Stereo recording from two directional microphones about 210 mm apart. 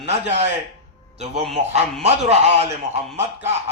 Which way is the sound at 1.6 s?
30° right (ahead or behind).